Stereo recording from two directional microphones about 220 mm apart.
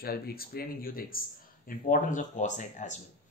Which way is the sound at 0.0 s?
45° left (ahead or behind).